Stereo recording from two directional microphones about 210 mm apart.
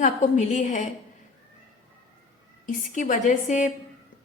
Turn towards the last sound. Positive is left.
turn(degrees=35)  # may be behind; listen again after turning